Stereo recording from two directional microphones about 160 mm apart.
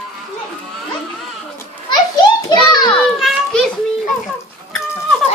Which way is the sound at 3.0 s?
Centre (ahead or behind).